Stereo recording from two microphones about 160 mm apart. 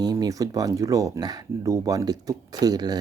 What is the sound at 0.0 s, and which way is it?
Speech, 25° right (ahead or behind).